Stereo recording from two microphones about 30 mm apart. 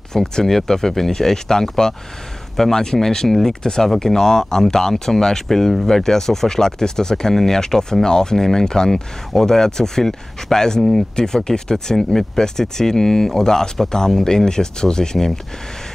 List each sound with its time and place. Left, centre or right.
0.1 s speech: centre
10.8 s speech: centre
11.3 s speech: left